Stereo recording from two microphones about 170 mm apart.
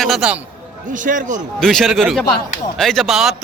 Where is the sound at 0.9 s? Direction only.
50° right (ahead or behind).